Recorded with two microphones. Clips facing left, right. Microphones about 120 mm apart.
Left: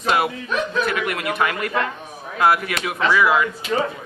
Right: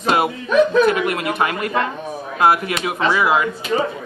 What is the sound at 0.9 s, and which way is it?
A man's voice, 30° right (ahead or behind).